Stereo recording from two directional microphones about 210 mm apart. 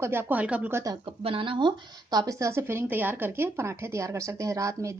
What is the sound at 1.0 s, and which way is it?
Speech, 25° right (ahead or behind).